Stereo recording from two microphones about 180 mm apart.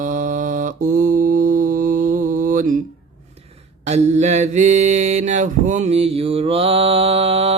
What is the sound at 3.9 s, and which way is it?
Mantra, 40° right (ahead or behind).